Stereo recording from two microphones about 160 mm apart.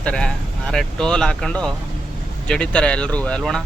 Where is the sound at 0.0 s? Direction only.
5° left (ahead or behind).